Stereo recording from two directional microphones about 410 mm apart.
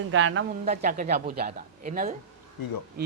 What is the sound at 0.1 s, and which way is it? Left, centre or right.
Speech, right.